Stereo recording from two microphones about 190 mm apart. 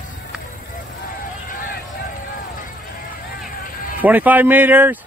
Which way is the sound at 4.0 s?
10° right (ahead or behind).